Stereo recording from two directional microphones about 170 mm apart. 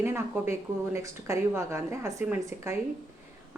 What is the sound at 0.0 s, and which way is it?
A woman's voice, 15° right (ahead or behind).